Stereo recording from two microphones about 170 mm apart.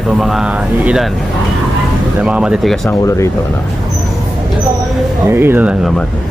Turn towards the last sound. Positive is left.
turn(degrees=-10)  # may be behind; listen again after turning